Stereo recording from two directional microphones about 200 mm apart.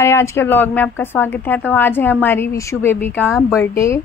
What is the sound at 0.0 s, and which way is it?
A woman's voice, 15° left (ahead or behind).